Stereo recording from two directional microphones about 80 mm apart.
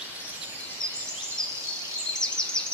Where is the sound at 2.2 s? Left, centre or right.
Centre.